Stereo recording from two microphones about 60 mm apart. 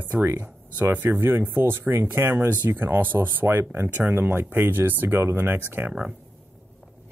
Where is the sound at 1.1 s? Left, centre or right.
Right.